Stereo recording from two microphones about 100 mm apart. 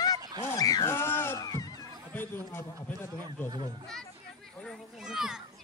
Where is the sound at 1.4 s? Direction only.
35° left (ahead or behind).